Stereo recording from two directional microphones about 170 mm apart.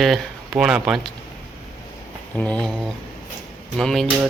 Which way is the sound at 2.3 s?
5° left (ahead or behind).